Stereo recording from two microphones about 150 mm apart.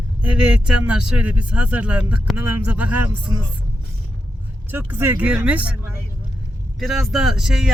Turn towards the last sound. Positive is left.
turn(degrees=-5)  # may be behind; listen again after turning